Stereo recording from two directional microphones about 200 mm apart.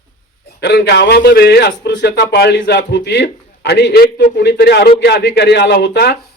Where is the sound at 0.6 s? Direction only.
55° left (ahead or behind).